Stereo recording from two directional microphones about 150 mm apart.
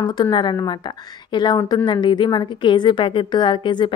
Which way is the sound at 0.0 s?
30° left (ahead or behind).